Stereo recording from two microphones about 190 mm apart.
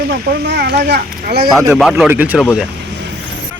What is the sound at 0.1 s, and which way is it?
Speech, 55° right (ahead or behind).